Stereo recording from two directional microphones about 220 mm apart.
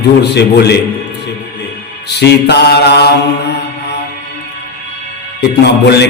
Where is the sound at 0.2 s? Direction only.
50° left (ahead or behind).